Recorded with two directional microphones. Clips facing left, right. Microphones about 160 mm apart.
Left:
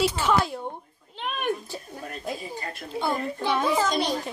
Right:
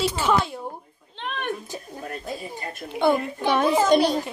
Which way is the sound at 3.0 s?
70° right (ahead or behind).